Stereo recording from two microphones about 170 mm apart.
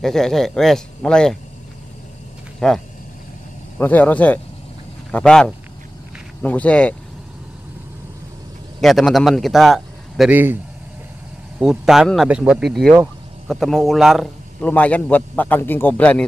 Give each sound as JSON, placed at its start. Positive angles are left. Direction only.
{"t": 0.0, "sound": "speech", "side_deg": 0}
{"t": 2.6, "sound": "speech", "side_deg": 5}
{"t": 8.8, "sound": "speech", "side_deg": 0}
{"t": 11.6, "sound": "speech", "side_deg": 0}